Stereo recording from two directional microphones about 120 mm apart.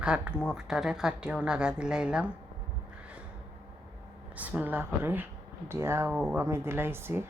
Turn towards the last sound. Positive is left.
turn(degrees=-20)  # may be behind; listen again after turning